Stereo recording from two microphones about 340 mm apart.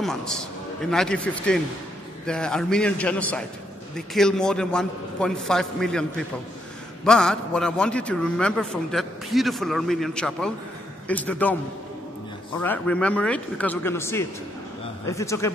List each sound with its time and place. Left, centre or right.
0.0 s a man's voice: centre
12.5 s a man's voice: centre